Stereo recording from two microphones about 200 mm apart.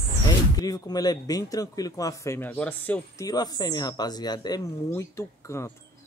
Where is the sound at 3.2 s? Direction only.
20° left (ahead or behind).